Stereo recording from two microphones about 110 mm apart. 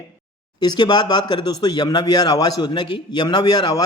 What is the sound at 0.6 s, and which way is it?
Speech, 40° left (ahead or behind).